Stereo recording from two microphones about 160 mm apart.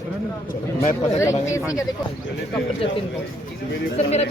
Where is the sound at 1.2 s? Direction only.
20° left (ahead or behind).